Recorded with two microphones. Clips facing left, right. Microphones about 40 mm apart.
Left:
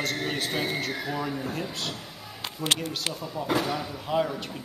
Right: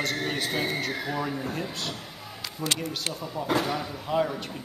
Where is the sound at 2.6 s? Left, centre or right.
Left.